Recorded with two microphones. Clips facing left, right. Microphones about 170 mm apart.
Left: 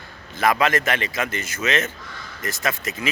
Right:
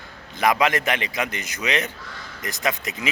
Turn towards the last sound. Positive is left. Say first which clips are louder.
# even
turn(degrees=-15)  # may be behind; listen again after turning